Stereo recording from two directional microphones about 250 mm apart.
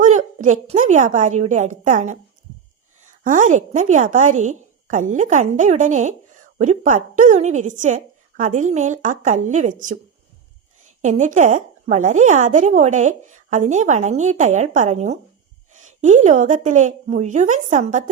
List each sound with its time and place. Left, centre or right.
0.0 s a woman's voice: right
11.0 s a woman's voice: right